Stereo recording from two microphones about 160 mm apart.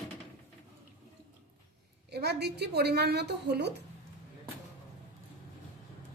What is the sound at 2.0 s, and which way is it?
A woman's voice, 90° right.